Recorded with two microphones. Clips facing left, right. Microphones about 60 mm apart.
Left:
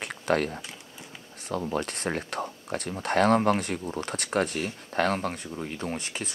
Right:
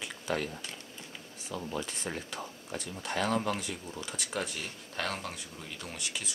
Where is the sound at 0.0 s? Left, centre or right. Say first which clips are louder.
Left 8 dB; left.